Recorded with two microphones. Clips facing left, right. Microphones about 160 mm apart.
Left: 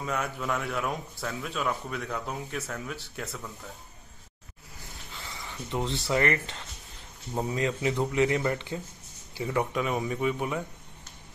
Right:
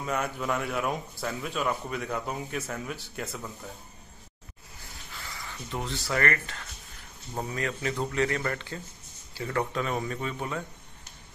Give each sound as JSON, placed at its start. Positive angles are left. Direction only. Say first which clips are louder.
{"t": 0.0, "sound": "speech", "louder": "right 1 dB", "side_deg": 0}
{"t": 5.1, "sound": "a man's voice", "louder": "left 1 dB", "side_deg": 20}